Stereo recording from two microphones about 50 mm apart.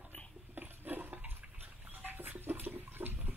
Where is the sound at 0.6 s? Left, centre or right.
Right.